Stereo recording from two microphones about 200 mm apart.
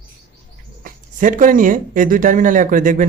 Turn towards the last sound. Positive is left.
turn(degrees=-40)  # may be behind; listen again after turning